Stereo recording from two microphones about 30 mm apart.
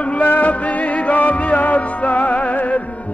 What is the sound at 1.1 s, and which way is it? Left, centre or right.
Music, left.